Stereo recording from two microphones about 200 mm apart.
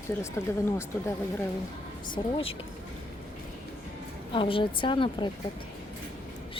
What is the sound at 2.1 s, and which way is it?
Speech, 25° left (ahead or behind).